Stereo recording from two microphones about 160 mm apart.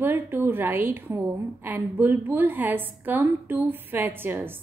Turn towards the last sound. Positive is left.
turn(degrees=-15)  # may be behind; listen again after turning